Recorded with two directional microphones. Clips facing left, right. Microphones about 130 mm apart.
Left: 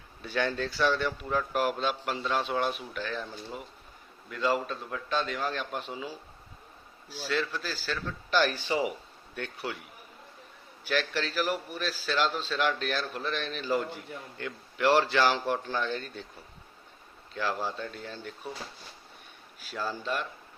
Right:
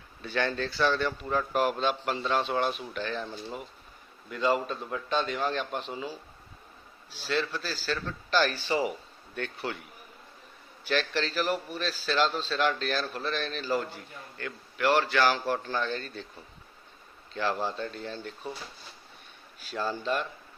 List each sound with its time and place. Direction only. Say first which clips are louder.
0.2 s a man's voice: even; 5° left (ahead or behind)
4.3 s a man's voice: right 2 dB; centre (ahead or behind)
7.8 s a man's voice: right 2 dB; 10° left (ahead or behind)
10.8 s a man's voice: right 1 dB; 10° left (ahead or behind)
15.5 s a man's voice: even; 10° left (ahead or behind)
17.3 s a man's voice: right 2 dB; 5° left (ahead or behind)
19.7 s a man's voice: right 3 dB; 5° left (ahead or behind)